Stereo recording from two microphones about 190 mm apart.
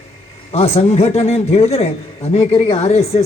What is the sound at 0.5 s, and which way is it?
A man's voice, 35° left (ahead or behind).